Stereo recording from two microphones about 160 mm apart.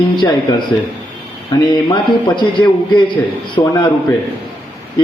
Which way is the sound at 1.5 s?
25° left (ahead or behind).